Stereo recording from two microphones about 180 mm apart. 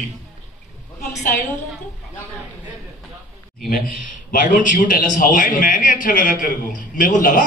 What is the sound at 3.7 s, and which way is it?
A man's voice, 50° left (ahead or behind).